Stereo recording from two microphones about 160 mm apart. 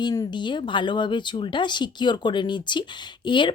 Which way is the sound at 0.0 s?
25° left (ahead or behind).